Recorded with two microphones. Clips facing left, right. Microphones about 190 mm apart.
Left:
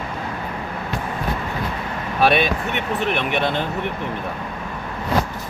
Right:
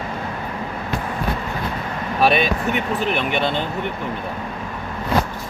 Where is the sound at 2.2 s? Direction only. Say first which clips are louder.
Even; centre (ahead or behind).